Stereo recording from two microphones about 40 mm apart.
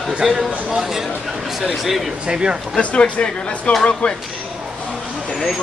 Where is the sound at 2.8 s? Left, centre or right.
Left.